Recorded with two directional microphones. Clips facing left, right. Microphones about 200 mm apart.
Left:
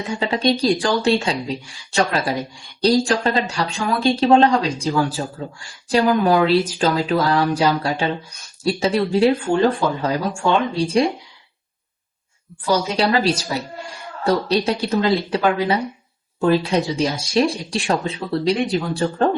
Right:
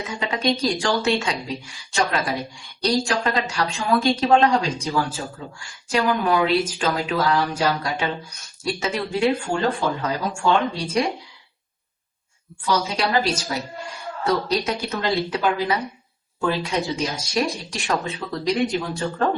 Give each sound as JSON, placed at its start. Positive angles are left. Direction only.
{"t": 0.0, "sound": "speech", "side_deg": 30}
{"t": 12.6, "sound": "speech", "side_deg": 35}
{"t": 16.4, "sound": "speech", "side_deg": 30}